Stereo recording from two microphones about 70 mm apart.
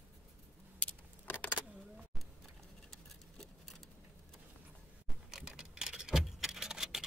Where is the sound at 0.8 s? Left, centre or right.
Left.